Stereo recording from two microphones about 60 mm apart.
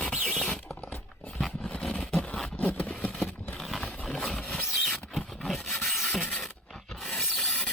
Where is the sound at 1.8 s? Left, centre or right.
Centre.